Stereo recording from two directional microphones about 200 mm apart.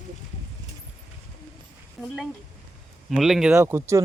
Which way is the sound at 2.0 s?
Centre (ahead or behind).